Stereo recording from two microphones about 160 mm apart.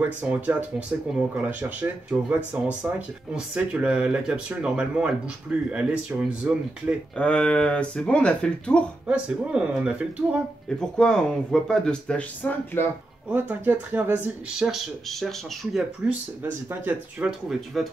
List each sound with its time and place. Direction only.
0.0 s speech: 10° right (ahead or behind)
7.2 s speech: 5° left (ahead or behind)
9.0 s speech: 5° right (ahead or behind)
11.0 s speech: 5° left (ahead or behind)
13.3 s speech: 10° right (ahead or behind)